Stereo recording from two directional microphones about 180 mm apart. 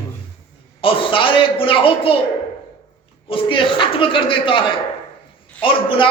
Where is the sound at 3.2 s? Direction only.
30° left (ahead or behind).